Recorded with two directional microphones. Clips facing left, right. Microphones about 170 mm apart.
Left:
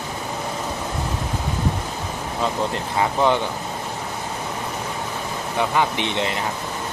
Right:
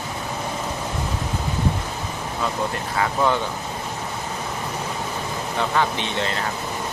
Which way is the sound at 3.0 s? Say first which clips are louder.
Left 2 dB; 20° left (ahead or behind).